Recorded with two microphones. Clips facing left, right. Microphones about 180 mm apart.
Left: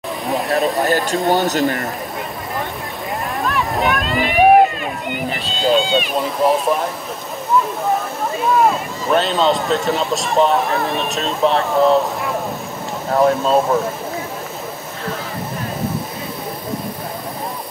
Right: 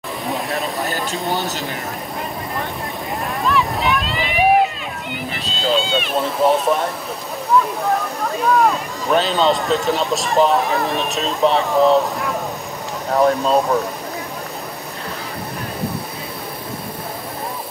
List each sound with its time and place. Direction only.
0.3 s speech: centre (ahead or behind)
3.4 s boat: 50° left (ahead or behind)
5.8 s speech: centre (ahead or behind)
8.4 s speech: centre (ahead or behind)